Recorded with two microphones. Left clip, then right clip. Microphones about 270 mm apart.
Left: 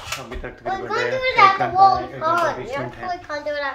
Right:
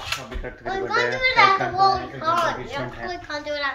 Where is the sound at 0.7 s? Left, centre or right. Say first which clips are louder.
Even; left.